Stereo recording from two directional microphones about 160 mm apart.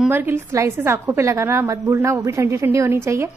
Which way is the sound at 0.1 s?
15° right (ahead or behind).